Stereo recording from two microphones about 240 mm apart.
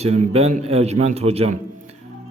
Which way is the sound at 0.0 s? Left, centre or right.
Right.